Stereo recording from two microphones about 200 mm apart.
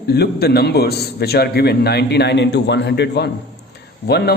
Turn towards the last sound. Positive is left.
turn(degrees=55)  # may be behind; listen again after turning